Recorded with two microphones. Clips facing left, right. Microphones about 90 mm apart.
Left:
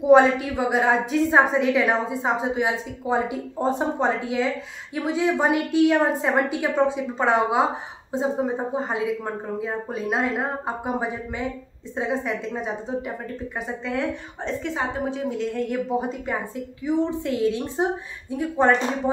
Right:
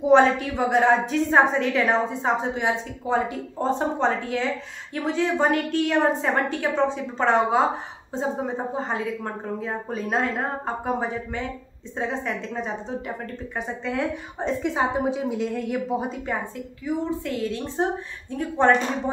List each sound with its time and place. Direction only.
0.0 s a woman's voice: 5° left (ahead or behind)
14.4 s speech: 15° right (ahead or behind)
16.8 s a woman's voice: 20° left (ahead or behind)